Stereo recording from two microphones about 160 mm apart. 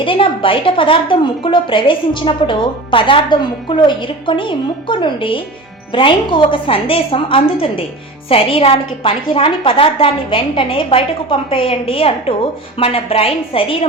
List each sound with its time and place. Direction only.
0.0 s a woman's voice: 35° left (ahead or behind)